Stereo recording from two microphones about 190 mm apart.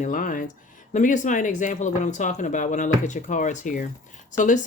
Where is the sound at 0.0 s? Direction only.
45° left (ahead or behind).